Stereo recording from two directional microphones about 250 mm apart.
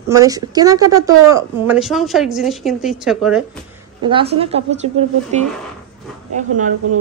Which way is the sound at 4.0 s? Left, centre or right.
Centre.